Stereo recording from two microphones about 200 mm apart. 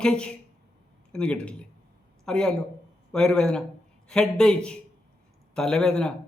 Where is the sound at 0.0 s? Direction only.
5° left (ahead or behind).